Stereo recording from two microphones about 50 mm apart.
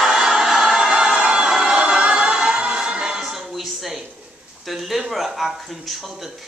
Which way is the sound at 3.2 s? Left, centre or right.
Centre.